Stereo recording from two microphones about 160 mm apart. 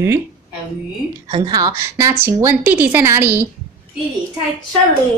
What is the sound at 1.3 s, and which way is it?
A woman's voice, 25° right (ahead or behind).